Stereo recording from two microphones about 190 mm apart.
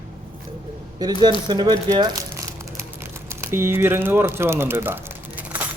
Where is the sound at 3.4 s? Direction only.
15° right (ahead or behind).